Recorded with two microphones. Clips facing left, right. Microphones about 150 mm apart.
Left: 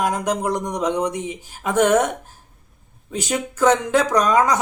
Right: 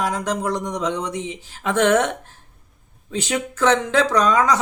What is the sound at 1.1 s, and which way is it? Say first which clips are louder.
Speech: left 1 dB; 50° left (ahead or behind).